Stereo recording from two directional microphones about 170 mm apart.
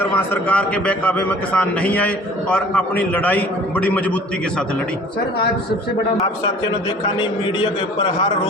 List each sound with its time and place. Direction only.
0.1 s a man's voice: 10° left (ahead or behind)
7.2 s a man's voice: 25° left (ahead or behind)